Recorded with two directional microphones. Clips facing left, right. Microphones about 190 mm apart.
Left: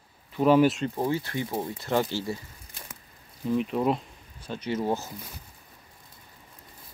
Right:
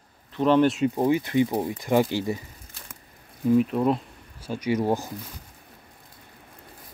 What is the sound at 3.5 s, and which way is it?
Speech, centre (ahead or behind).